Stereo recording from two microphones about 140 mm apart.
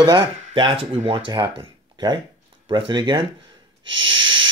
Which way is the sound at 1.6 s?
30° right (ahead or behind).